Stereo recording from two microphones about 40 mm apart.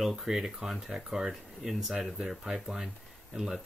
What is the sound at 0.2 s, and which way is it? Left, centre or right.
Speech, centre.